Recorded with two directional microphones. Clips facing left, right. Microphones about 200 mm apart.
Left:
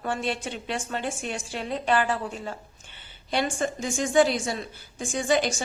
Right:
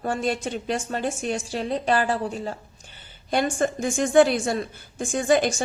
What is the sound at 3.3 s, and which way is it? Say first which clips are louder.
A woman's voice: right 4 dB; 50° right (ahead or behind).